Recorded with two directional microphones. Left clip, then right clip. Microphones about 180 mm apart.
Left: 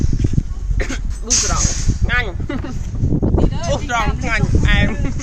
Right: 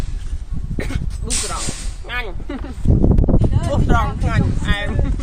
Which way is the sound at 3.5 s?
30° left (ahead or behind).